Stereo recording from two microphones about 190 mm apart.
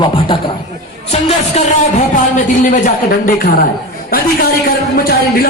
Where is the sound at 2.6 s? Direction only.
45° left (ahead or behind).